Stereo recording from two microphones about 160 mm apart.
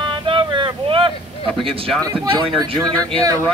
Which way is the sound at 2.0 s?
25° right (ahead or behind).